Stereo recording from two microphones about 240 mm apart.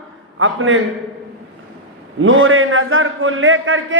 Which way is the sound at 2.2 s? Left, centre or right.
Right.